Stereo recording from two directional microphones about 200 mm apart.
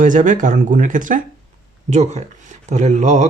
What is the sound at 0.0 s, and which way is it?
Speech, 40° right (ahead or behind).